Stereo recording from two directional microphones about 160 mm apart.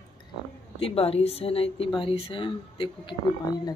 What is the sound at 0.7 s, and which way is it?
Speech, 35° left (ahead or behind).